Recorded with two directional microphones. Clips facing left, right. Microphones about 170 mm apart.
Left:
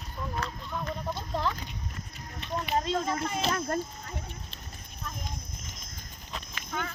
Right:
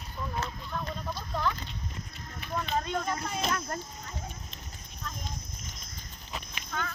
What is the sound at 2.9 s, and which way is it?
Speech, 25° left (ahead or behind).